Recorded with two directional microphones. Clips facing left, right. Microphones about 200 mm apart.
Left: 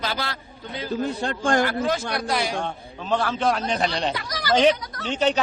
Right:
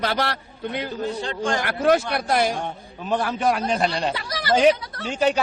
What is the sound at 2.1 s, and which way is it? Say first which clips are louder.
Speech: right 4 dB; 50° right (ahead or behind).